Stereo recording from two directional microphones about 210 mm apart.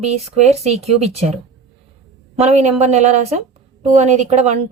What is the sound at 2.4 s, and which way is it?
A woman's voice, 30° right (ahead or behind).